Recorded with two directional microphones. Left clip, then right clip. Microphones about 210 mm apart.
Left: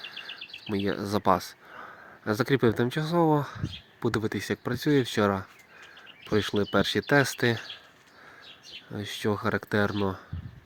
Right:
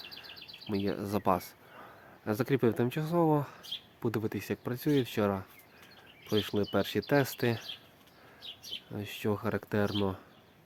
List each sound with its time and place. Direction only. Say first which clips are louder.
0.9 s speech: left 6 dB; 15° left (ahead or behind)
8.9 s speech: left 5 dB; 15° left (ahead or behind)